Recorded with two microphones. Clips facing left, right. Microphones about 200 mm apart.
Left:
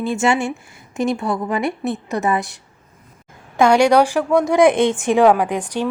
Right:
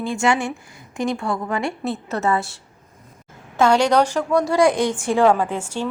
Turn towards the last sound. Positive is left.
turn(degrees=15)  # may be behind; listen again after turning